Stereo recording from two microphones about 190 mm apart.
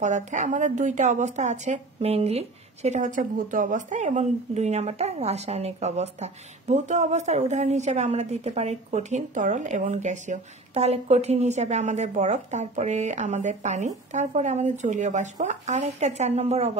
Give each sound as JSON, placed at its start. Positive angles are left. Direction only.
{"t": 0.0, "sound": "speech", "side_deg": -40}